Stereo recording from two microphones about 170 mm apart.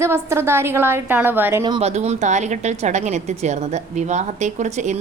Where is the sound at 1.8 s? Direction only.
40° right (ahead or behind).